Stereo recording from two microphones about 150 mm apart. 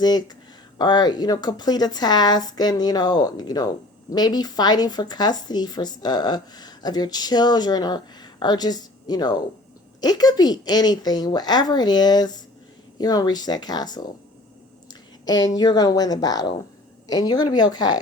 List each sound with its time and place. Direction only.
0.0 s speech: 25° left (ahead or behind)
15.2 s speech: 25° left (ahead or behind)